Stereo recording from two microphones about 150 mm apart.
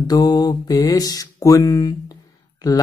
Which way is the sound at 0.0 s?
25° left (ahead or behind).